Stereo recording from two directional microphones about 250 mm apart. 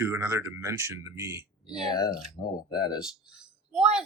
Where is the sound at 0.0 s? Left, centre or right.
Centre.